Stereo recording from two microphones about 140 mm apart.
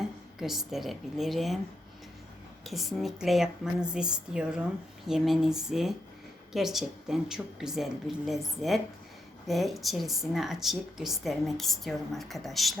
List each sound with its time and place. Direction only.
0.0 s speech: centre (ahead or behind)
2.6 s speech: centre (ahead or behind)